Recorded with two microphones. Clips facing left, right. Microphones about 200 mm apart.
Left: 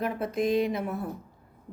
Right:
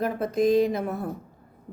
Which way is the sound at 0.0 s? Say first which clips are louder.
Right 4 dB; 40° right (ahead or behind).